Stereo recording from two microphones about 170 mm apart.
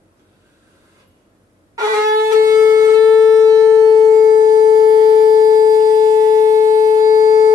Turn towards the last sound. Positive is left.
turn(degrees=-20)  # may be behind; listen again after turning